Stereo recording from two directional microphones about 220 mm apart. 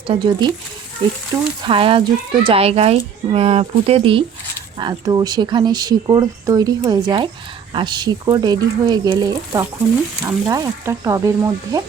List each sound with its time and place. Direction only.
0.1 s speech: 20° right (ahead or behind)
1.6 s speech: 25° right (ahead or behind)